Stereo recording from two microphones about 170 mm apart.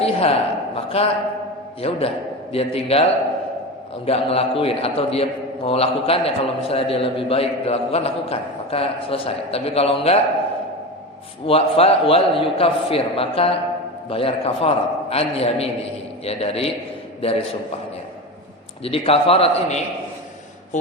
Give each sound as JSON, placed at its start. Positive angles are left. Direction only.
{"t": 0.0, "sound": "a man's voice", "side_deg": 35}
{"t": 11.4, "sound": "a man's voice", "side_deg": 35}
{"t": 18.8, "sound": "a man's voice", "side_deg": 35}